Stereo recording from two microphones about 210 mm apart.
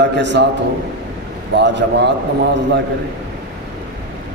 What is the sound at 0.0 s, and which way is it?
Speech, 55° right (ahead or behind).